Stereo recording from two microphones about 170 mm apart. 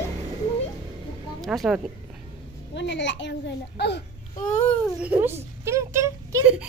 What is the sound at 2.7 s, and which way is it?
A child's voice, 90° left.